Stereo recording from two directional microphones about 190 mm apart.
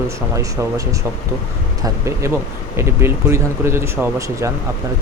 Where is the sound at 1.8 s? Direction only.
15° right (ahead or behind).